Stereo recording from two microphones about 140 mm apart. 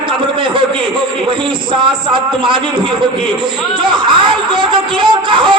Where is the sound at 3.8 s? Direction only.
35° right (ahead or behind).